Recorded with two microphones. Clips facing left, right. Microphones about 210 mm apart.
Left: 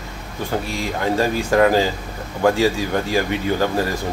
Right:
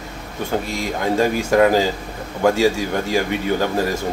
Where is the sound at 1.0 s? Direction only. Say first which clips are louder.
Right 1 dB; 20° right (ahead or behind).